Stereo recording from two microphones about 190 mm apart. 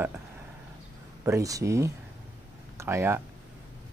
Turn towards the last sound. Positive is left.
turn(degrees=-15)  # may be behind; listen again after turning